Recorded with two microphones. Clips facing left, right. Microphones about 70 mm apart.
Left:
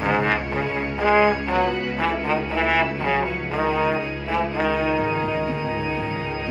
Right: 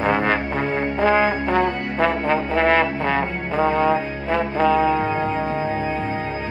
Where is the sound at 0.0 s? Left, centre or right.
Centre.